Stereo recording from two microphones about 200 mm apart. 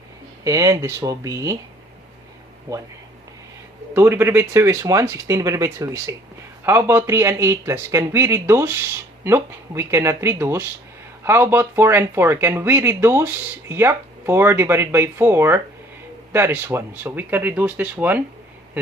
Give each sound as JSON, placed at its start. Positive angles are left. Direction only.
{"t": 0.4, "sound": "speech", "side_deg": -15}
{"t": 3.9, "sound": "speech", "side_deg": -10}